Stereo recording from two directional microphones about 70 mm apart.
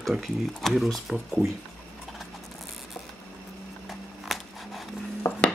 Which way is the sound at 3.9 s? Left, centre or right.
Centre.